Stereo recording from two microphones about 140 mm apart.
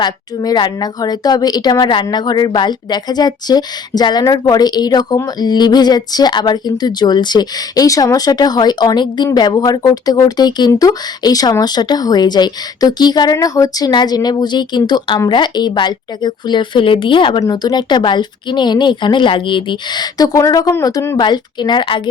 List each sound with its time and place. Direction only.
0.0 s a woman's voice: 30° left (ahead or behind)